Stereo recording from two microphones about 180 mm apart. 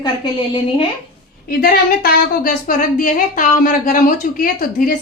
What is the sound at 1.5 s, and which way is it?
A woman's voice, 55° left (ahead or behind).